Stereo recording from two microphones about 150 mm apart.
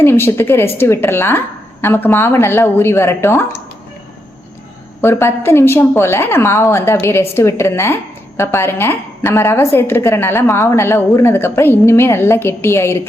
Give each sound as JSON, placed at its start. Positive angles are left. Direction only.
{"t": 0.0, "sound": "a woman's voice", "side_deg": 15}
{"t": 4.9, "sound": "a woman's voice", "side_deg": 15}